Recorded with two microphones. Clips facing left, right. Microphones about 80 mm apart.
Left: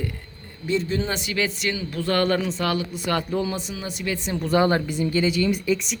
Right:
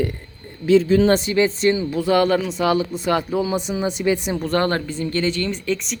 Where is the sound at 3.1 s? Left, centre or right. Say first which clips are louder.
Right 3 dB; centre.